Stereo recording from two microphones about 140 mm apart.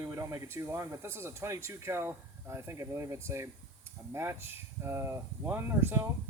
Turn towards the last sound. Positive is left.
turn(degrees=-15)  # may be behind; listen again after turning